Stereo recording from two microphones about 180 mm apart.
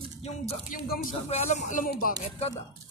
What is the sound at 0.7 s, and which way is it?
Speech, 50° left (ahead or behind).